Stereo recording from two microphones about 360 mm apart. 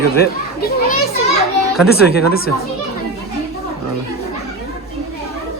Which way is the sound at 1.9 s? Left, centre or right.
Left.